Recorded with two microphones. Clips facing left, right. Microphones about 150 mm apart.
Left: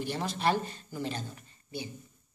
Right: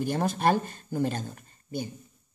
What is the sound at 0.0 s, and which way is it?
Speech, 45° right (ahead or behind).